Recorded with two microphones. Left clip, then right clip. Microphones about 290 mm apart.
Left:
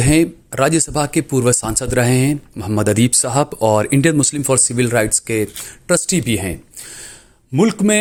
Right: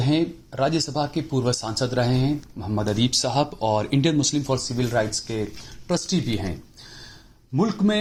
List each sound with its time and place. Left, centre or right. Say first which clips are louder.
0.0 s speech: left 8 dB; left
7.5 s speech: left 8 dB; left